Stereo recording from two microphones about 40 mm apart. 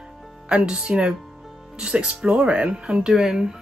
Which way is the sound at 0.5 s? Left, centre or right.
Right.